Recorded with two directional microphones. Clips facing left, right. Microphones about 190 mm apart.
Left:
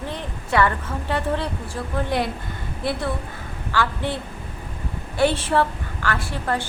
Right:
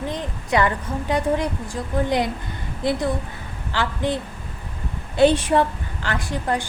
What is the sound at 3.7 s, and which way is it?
A woman's voice, 20° right (ahead or behind).